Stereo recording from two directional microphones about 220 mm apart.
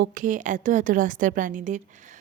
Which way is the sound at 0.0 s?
35° right (ahead or behind).